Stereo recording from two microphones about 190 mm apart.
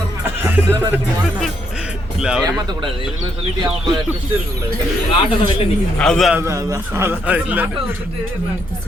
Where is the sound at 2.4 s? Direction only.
20° right (ahead or behind).